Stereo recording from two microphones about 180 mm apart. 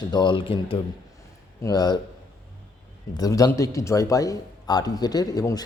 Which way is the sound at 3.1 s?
20° left (ahead or behind).